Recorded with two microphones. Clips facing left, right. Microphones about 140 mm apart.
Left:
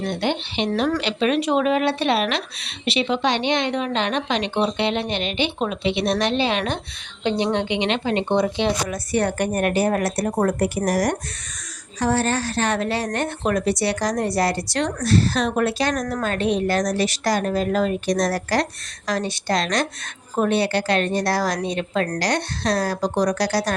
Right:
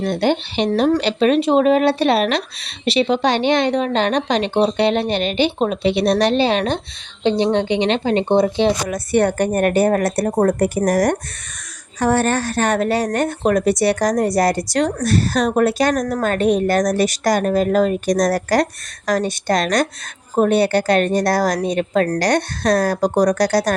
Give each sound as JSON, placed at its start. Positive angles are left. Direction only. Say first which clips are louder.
{"t": 0.0, "sound": "a woman's voice", "louder": "right 6 dB", "side_deg": -40}
{"t": 9.1, "sound": "a woman's voice", "louder": "right 5 dB", "side_deg": -50}
{"t": 15.0, "sound": "a woman's voice", "louder": "right 2 dB", "side_deg": -45}